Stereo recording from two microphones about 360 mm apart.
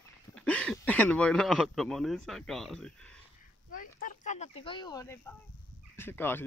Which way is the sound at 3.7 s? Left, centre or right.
Left.